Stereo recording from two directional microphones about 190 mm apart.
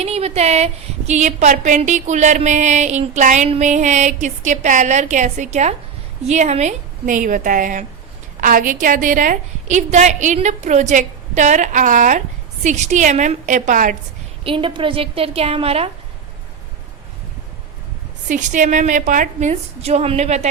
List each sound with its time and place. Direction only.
0.0 s a woman's voice: 35° right (ahead or behind)
14.4 s a woman's voice: 25° right (ahead or behind)
18.3 s a woman's voice: 40° right (ahead or behind)